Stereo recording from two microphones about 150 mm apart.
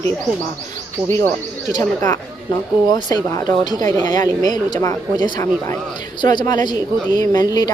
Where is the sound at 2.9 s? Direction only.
25° left (ahead or behind).